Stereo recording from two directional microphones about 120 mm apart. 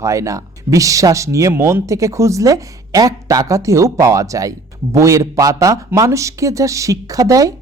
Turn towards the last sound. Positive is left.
turn(degrees=-30)  # may be behind; listen again after turning